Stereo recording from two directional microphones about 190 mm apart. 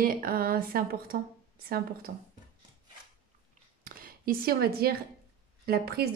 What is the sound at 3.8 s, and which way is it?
A woman's voice, 50° right (ahead or behind).